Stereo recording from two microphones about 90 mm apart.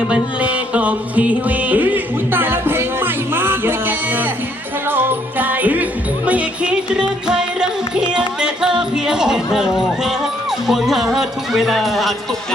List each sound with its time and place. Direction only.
0.1 s music: 15° right (ahead or behind)
10.7 s speech: 5° right (ahead or behind)